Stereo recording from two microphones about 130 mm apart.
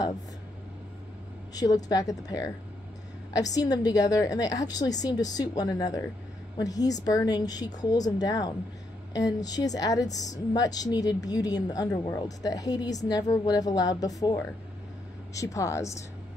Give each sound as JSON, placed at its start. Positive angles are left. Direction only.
{"t": 1.5, "sound": "a woman's voice", "side_deg": 30}